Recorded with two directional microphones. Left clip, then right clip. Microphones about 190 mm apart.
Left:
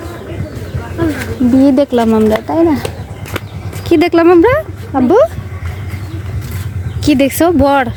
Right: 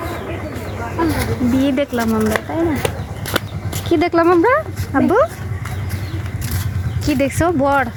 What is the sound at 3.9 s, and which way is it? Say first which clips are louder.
Speech: left 6 dB; 35° left (ahead or behind).